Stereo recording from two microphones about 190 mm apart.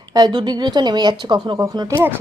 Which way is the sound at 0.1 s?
20° right (ahead or behind).